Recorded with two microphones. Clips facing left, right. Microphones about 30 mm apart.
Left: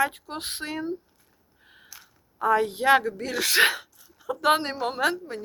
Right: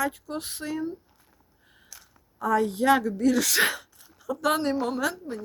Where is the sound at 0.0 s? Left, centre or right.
Left.